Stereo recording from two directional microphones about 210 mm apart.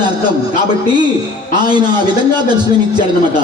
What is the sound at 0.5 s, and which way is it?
A man's voice, 20° right (ahead or behind).